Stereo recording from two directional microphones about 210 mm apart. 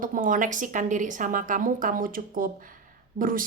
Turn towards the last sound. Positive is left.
turn(degrees=-40)  # may be behind; listen again after turning